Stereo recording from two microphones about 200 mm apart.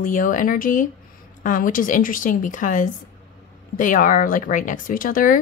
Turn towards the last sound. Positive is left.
turn(degrees=40)  # may be behind; listen again after turning